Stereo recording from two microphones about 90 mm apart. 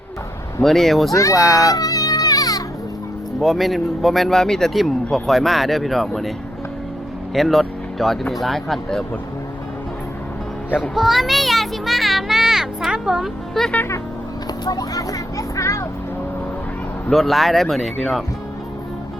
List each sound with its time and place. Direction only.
0.6 s speech: 5° left (ahead or behind)
1.1 s speech: 35° left (ahead or behind)
1.4 s speech: centre (ahead or behind)
1.6 s music: 40° left (ahead or behind)
3.4 s speech: centre (ahead or behind)
7.3 s speech: centre (ahead or behind)
10.8 s child singing: 5° right (ahead or behind)
14.6 s a sound: 45° left (ahead or behind)
17.1 s speech: centre (ahead or behind)